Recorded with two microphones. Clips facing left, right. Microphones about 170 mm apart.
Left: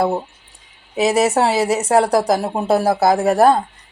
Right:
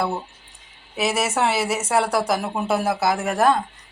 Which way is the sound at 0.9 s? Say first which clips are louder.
Left 7 dB; 40° left (ahead or behind).